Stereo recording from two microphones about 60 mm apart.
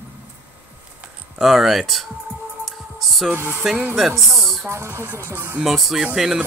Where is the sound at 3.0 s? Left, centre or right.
Centre.